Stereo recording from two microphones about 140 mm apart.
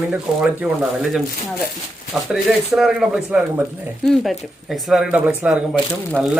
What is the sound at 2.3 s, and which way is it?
Speech, centre (ahead or behind).